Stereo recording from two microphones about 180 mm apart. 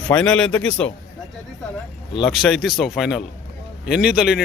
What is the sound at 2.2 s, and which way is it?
Speech, centre (ahead or behind).